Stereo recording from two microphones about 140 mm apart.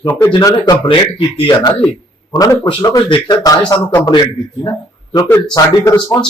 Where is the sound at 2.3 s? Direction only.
25° left (ahead or behind).